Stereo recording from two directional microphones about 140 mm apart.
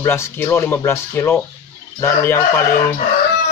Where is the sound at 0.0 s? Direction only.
20° left (ahead or behind).